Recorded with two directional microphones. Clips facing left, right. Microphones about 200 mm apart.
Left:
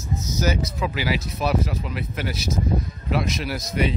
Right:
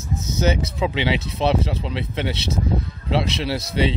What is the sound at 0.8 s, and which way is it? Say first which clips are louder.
Speech: right 5 dB; 25° right (ahead or behind).